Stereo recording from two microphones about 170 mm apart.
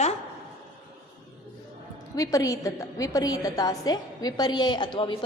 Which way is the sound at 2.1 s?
20° left (ahead or behind).